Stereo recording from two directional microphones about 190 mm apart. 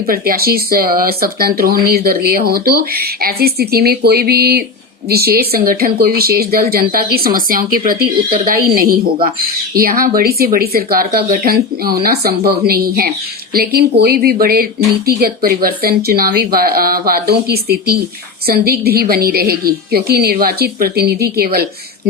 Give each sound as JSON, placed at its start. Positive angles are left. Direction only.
{"t": 0.1, "sound": "a woman's voice", "side_deg": -50}